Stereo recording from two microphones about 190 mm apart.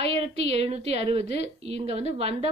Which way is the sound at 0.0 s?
35° right (ahead or behind).